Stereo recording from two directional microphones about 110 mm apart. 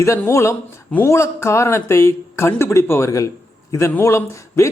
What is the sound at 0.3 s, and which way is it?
Speech, 25° left (ahead or behind).